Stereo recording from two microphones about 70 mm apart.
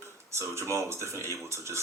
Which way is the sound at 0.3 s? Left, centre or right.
Right.